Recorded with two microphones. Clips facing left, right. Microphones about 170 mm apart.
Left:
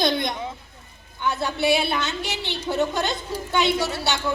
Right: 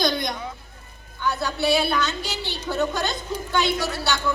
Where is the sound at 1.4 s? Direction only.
25° left (ahead or behind).